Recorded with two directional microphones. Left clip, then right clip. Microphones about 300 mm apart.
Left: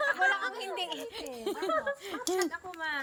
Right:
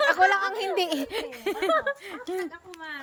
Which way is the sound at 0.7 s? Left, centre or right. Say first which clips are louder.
Right 9 dB; centre.